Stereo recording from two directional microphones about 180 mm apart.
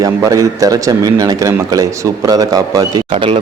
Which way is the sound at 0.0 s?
20° right (ahead or behind).